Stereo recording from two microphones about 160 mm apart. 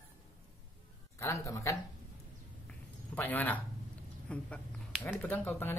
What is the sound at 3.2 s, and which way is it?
Speech, 10° left (ahead or behind).